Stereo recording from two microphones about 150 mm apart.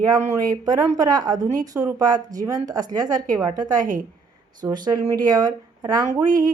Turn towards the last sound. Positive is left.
turn(degrees=-25)  # may be behind; listen again after turning